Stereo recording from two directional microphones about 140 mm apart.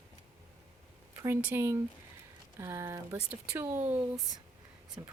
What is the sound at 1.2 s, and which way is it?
Speech, 15° right (ahead or behind).